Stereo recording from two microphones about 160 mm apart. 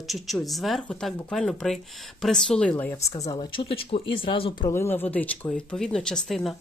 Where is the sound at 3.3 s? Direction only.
30° left (ahead or behind).